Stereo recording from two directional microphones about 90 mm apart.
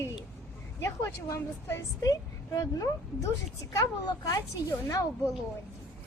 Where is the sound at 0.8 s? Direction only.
30° left (ahead or behind).